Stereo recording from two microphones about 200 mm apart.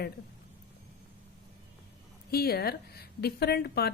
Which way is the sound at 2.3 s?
50° left (ahead or behind).